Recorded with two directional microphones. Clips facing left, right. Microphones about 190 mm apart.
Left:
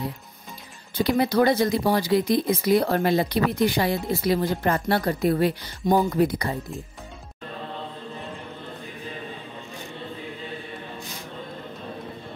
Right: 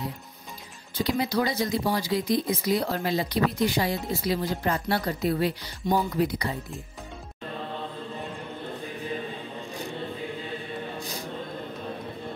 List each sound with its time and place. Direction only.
0.9 s speech: 60° left (ahead or behind)